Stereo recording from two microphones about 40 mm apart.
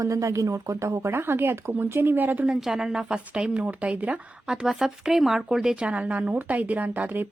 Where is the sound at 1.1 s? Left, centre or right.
Right.